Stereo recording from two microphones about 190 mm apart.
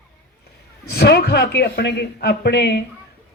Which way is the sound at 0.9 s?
60° left (ahead or behind).